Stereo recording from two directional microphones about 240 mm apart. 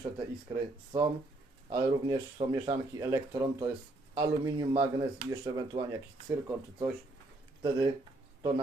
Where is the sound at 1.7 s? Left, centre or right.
Centre.